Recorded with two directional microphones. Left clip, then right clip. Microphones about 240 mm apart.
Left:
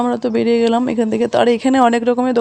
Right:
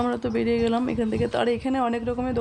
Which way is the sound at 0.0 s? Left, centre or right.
Left.